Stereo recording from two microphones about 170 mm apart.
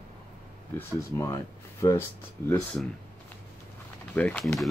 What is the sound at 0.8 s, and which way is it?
Speech, 20° left (ahead or behind).